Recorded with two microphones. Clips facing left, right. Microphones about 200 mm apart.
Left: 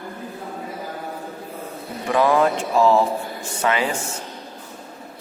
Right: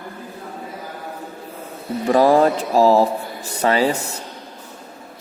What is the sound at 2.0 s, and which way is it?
Speech, 35° right (ahead or behind).